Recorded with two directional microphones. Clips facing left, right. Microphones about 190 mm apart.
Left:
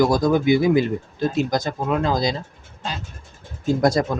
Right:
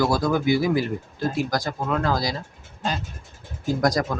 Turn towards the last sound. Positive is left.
turn(degrees=25)  # may be behind; listen again after turning